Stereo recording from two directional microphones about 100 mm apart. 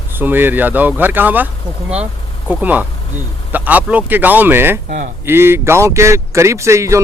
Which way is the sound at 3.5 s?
15° right (ahead or behind).